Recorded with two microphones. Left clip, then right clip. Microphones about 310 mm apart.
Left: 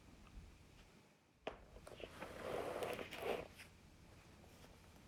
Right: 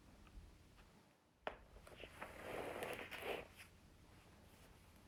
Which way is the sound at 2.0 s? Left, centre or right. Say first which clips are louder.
Left 2 dB; centre.